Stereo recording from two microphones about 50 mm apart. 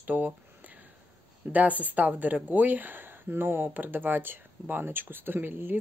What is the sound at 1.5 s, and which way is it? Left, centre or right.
A woman's voice, right.